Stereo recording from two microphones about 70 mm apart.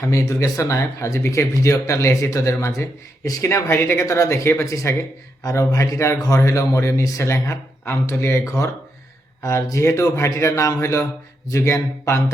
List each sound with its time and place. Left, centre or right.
0.0 s speech: left
3.2 s speech: left